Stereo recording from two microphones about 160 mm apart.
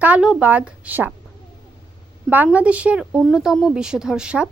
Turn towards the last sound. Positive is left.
turn(degrees=-5)  # may be behind; listen again after turning